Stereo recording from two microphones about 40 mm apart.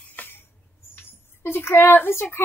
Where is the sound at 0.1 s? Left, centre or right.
Left.